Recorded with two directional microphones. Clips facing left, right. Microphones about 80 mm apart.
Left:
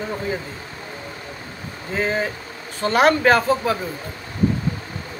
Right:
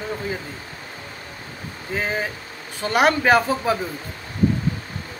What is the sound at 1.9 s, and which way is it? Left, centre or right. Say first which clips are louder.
Speech: left 3 dB; centre.